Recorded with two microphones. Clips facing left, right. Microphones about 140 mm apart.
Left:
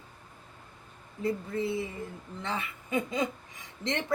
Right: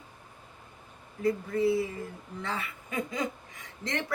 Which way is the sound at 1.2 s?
25° left (ahead or behind).